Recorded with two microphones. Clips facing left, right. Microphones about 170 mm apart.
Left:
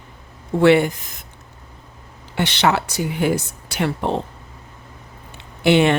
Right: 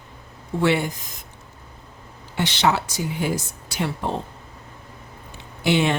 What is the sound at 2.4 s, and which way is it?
A woman's voice, 65° left (ahead or behind).